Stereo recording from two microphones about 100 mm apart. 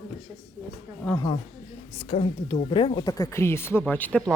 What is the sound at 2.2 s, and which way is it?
Speech, 55° left (ahead or behind).